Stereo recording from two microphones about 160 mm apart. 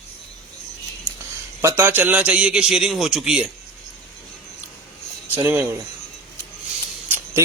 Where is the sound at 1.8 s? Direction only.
10° right (ahead or behind).